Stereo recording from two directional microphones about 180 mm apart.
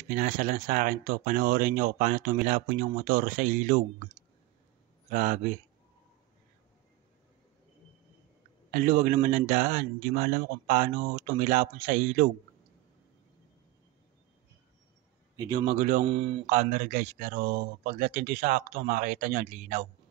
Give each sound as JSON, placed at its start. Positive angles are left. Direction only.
{"t": 0.1, "sound": "speech", "side_deg": -45}
{"t": 5.1, "sound": "speech", "side_deg": -45}
{"t": 8.7, "sound": "speech", "side_deg": -50}
{"t": 15.3, "sound": "a man's voice", "side_deg": -20}
{"t": 15.6, "sound": "speech", "side_deg": -45}
{"t": 16.1, "sound": "speech", "side_deg": -30}
{"t": 16.4, "sound": "speech", "side_deg": -45}